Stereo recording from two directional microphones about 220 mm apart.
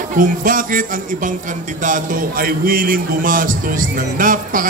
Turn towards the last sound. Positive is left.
turn(degrees=-40)  # may be behind; listen again after turning